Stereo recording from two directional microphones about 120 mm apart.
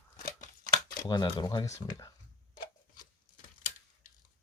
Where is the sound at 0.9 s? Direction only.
35° left (ahead or behind).